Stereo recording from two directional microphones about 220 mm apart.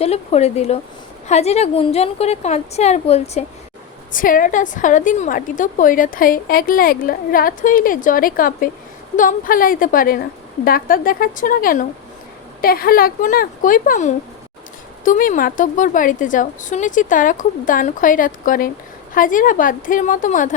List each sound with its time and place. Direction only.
0.0 s a woman's voice: 30° left (ahead or behind)